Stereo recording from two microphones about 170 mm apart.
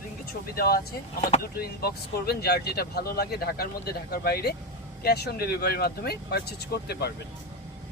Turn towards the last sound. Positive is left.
turn(degrees=70)  # may be behind; listen again after turning